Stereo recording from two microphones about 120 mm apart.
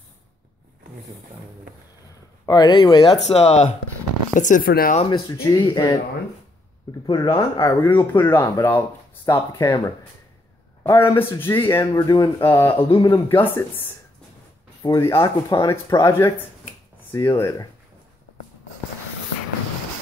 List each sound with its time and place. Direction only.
2.4 s speech: 35° left (ahead or behind)
3.3 s speech: 65° left (ahead or behind)
4.4 s speech: 90° left
5.3 s speech: 25° left (ahead or behind)
5.7 s speech: 40° left (ahead or behind)
7.1 s speech: 40° left (ahead or behind)
7.8 s speech: 20° left (ahead or behind)
10.8 s a sound: 20° left (ahead or behind)
11.1 s speech: 20° left (ahead or behind)
11.9 s speech: 35° left (ahead or behind)
12.4 s speech: 20° left (ahead or behind)
15.0 s speech: 25° left (ahead or behind)